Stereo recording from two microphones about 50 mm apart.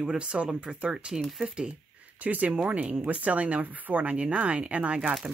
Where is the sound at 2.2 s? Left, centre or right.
Right.